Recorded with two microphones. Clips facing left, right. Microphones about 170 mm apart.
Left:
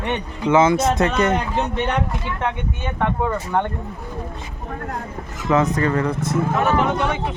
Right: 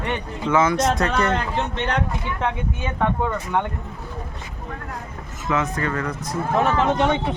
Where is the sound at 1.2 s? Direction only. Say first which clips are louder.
Left 2 dB; 20° left (ahead or behind).